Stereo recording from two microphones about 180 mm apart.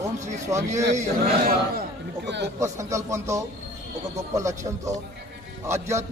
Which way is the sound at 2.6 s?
15° right (ahead or behind).